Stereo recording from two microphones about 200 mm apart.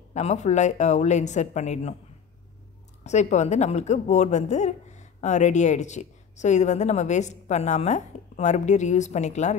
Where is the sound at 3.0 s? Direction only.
35° left (ahead or behind).